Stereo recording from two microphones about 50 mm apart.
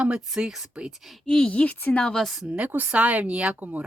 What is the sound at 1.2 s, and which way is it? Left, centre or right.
Speech, centre.